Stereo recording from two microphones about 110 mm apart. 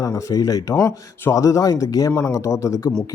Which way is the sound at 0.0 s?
30° left (ahead or behind).